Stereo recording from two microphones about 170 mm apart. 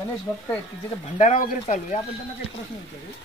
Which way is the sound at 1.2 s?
45° left (ahead or behind).